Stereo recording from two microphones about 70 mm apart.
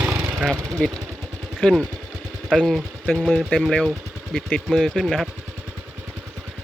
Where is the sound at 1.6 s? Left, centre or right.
Centre.